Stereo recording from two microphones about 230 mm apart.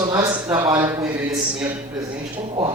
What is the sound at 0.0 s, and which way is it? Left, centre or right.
Speech, centre.